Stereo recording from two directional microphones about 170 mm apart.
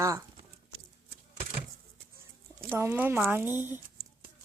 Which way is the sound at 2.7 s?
15° right (ahead or behind).